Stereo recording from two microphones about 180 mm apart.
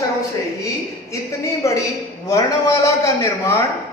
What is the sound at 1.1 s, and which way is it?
A man's voice, 15° left (ahead or behind).